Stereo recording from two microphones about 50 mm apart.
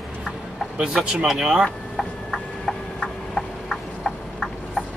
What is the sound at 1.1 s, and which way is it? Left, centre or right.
Speech, centre.